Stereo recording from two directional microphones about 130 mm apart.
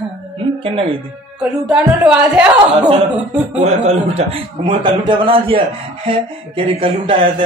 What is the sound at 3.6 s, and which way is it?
Speech, 55° right (ahead or behind).